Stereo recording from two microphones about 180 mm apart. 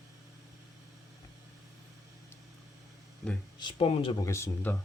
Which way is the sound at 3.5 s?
30° left (ahead or behind).